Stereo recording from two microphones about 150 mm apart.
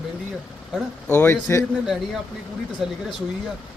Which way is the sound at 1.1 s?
10° left (ahead or behind).